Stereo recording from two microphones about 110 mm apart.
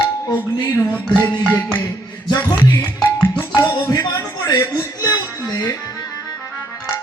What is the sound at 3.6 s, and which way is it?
Music, 30° left (ahead or behind).